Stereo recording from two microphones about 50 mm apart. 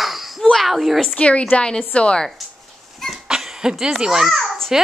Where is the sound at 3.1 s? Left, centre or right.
Centre.